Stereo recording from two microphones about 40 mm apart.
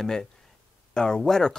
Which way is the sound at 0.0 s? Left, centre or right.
Centre.